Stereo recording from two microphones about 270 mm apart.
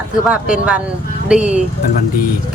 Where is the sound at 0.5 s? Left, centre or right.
Centre.